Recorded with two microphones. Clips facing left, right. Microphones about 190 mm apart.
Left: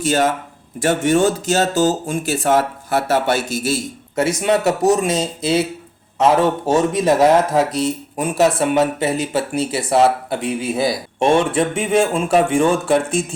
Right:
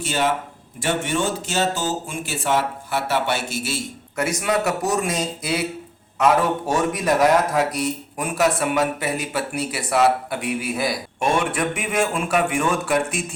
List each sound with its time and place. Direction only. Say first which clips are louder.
0.0 s speech: left 5 dB; 45° left (ahead or behind)
4.1 s speech: left 5 dB; 25° left (ahead or behind)